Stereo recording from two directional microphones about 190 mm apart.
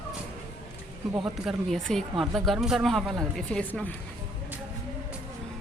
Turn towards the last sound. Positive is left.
turn(degrees=5)  # may be behind; listen again after turning